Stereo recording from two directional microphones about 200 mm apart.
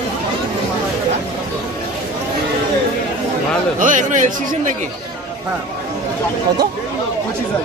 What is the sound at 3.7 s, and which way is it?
Speech, 40° right (ahead or behind).